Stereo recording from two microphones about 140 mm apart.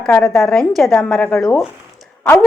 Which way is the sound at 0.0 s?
5° left (ahead or behind).